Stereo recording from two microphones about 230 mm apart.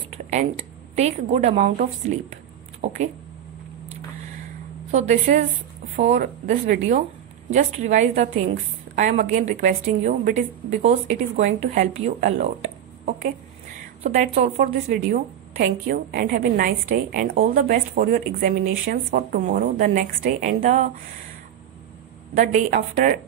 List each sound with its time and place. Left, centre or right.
0.1 s a woman's voice: right
4.9 s a woman's voice: right
22.3 s a woman's voice: right